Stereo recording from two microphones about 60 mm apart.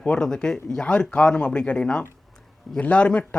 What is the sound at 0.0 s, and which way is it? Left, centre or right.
Speech, centre.